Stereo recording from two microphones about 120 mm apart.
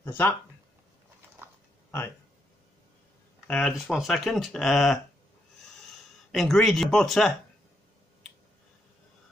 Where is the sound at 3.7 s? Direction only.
Centre (ahead or behind).